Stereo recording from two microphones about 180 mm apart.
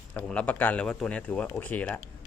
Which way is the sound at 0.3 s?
5° left (ahead or behind).